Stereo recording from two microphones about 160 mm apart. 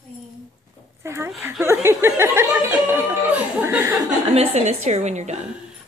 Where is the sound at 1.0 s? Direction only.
15° right (ahead or behind).